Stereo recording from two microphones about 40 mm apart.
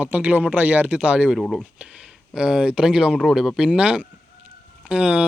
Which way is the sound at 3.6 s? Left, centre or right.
Right.